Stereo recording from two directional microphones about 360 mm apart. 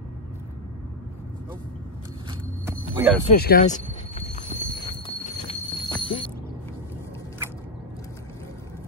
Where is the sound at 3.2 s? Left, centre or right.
Left.